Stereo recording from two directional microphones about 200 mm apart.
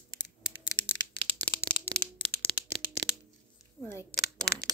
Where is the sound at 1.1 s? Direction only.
25° right (ahead or behind).